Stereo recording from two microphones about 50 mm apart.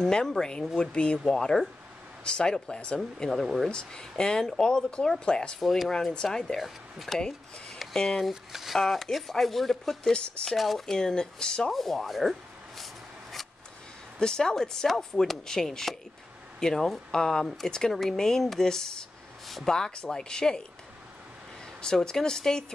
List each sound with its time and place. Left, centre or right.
0.0 s speech: centre
5.6 s speech: centre
6.6 s speech: centre
7.2 s speech: centre
8.2 s speech: centre
8.7 s speech: centre
10.1 s speech: centre
10.5 s speech: centre
10.9 s speech: centre
11.7 s a sound: centre
14.2 s speech: centre
19.4 s a sound: centre
19.7 s speech: centre
21.8 s speech: centre